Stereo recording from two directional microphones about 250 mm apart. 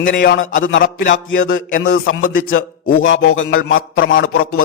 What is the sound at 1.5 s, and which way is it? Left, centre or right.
Speech, left.